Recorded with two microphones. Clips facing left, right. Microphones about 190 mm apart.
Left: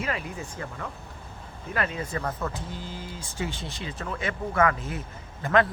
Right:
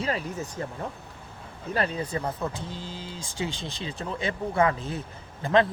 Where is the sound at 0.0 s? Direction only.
35° right (ahead or behind).